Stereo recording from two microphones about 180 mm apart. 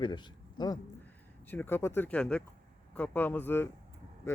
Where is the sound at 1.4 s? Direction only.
10° left (ahead or behind).